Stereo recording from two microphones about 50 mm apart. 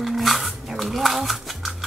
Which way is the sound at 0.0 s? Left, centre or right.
Centre.